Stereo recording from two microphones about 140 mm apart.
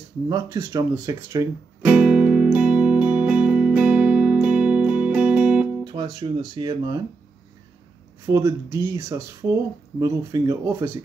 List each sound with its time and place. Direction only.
0.3 s speech: 25° right (ahead or behind)
1.9 s music: 10° right (ahead or behind)
5.9 s speech: 30° right (ahead or behind)
8.3 s speech: 20° right (ahead or behind)